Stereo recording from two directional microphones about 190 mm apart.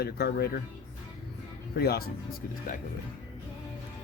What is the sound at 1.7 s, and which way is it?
Speech, 55° left (ahead or behind).